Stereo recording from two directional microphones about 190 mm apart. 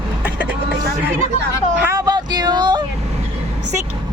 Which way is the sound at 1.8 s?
15° right (ahead or behind).